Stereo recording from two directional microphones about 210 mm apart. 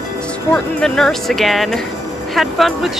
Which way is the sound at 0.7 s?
5° left (ahead or behind).